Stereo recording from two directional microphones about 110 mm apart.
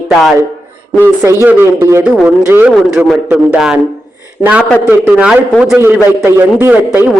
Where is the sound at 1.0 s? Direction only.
25° right (ahead or behind).